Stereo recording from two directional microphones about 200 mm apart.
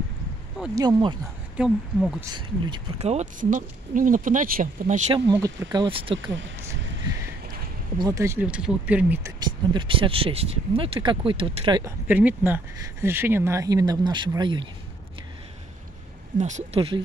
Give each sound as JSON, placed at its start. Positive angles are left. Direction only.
{"t": 0.7, "sound": "speech", "side_deg": -20}
{"t": 1.6, "sound": "speech", "side_deg": -5}
{"t": 2.3, "sound": "speech", "side_deg": -25}
{"t": 8.0, "sound": "speech", "side_deg": -15}
{"t": 9.8, "sound": "speech", "side_deg": -25}
{"t": 12.1, "sound": "speech", "side_deg": -10}
{"t": 16.3, "sound": "speech", "side_deg": -35}